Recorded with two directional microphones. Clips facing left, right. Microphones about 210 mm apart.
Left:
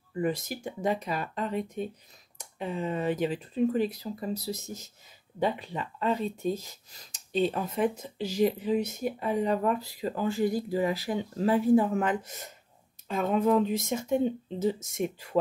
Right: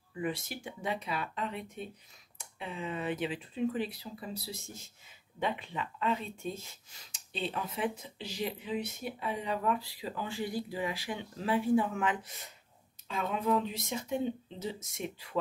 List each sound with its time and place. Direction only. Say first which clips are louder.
0.1 s speech: left 6 dB; 40° left (ahead or behind)